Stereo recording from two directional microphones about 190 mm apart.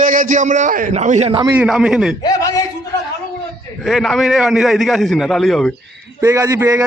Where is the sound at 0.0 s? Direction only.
45° right (ahead or behind).